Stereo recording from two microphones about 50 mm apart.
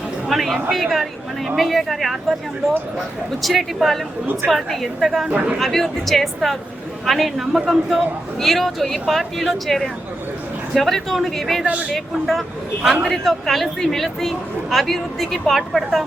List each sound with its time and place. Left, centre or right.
0.3 s a woman's voice: centre
3.4 s a woman's voice: centre
11.6 s speech: right
11.9 s a woman's voice: centre
13.2 s a woman's voice: centre